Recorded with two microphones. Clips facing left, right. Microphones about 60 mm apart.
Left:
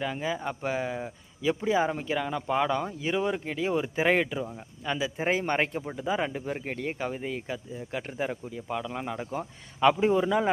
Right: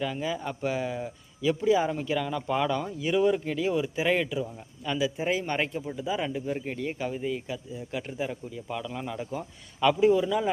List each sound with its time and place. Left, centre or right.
0.0 s speech: left
3.6 s speech: left
8.6 s speech: left